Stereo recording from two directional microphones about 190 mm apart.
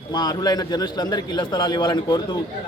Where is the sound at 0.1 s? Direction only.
20° left (ahead or behind).